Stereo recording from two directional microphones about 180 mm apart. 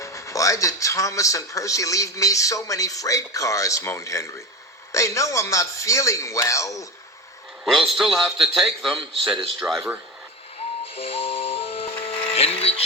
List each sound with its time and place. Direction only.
0.0 s speech: 15° left (ahead or behind)
7.6 s a man's voice: centre (ahead or behind)
10.9 s music: 30° left (ahead or behind)